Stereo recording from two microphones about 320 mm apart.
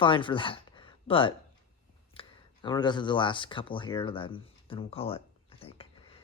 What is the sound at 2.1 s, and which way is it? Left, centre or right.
Speech, centre.